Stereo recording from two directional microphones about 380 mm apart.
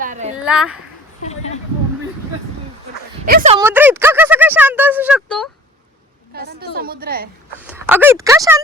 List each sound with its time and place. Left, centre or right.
0.0 s a sound: centre
0.4 s speech: centre
3.2 s speech: centre
6.3 s a woman's voice: right
7.6 s speech: centre